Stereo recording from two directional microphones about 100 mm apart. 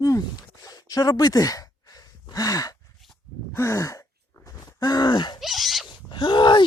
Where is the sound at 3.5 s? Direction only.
30° left (ahead or behind); by 5.4 s 45° left (ahead or behind).